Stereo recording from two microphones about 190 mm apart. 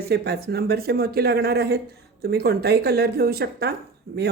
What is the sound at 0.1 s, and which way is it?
A woman's voice, 60° right (ahead or behind).